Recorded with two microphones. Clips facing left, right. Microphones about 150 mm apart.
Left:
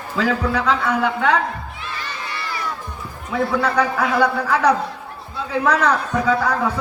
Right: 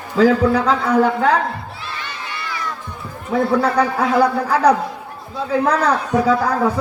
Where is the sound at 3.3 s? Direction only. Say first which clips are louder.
Right 4 dB; 35° right (ahead or behind).